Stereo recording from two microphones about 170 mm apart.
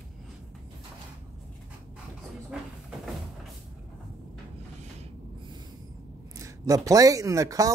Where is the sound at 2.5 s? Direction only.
5° right (ahead or behind).